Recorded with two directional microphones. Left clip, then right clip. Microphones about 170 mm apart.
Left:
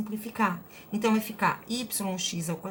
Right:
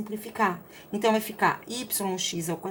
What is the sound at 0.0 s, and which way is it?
A woman's voice, 30° right (ahead or behind).